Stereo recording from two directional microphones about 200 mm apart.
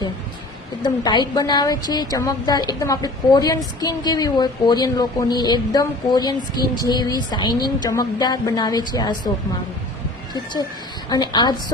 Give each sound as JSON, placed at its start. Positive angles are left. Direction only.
{"t": 0.8, "sound": "a woman's voice", "side_deg": 20}
{"t": 10.3, "sound": "a woman's voice", "side_deg": 20}